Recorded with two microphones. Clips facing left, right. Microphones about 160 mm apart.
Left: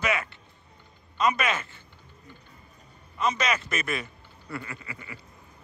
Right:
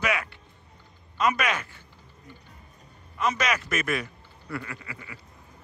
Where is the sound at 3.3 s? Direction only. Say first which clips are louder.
Even; 10° right (ahead or behind).